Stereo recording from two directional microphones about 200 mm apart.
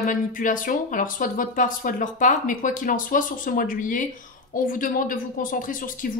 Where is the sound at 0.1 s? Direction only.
40° left (ahead or behind).